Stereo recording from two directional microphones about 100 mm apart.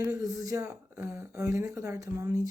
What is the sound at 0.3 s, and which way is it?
Speech, 30° right (ahead or behind).